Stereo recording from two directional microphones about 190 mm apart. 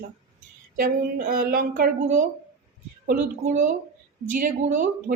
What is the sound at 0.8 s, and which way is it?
Speech, 50° right (ahead or behind).